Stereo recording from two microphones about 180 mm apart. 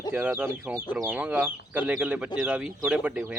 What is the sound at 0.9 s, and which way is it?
Speech, 10° right (ahead or behind).